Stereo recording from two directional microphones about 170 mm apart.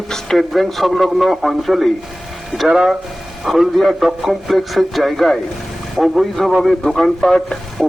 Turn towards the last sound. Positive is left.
turn(degrees=0)  # may be behind; listen again after turning